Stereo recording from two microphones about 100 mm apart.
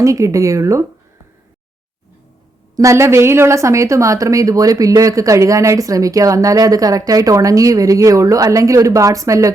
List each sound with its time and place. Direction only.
0.0 s speech: 35° right (ahead or behind)
2.7 s speech: 30° right (ahead or behind)